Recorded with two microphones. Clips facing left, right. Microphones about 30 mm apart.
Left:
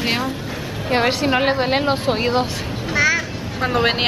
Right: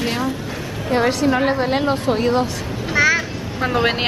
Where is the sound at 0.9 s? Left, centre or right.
Left.